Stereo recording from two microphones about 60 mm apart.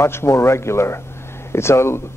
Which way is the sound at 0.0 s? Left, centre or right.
Left.